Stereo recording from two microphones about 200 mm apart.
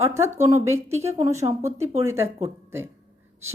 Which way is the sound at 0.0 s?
15° right (ahead or behind).